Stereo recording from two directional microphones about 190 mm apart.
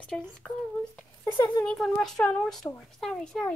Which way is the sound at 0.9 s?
15° left (ahead or behind).